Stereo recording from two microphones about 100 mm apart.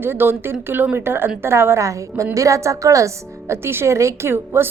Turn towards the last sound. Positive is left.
turn(degrees=-25)  # may be behind; listen again after turning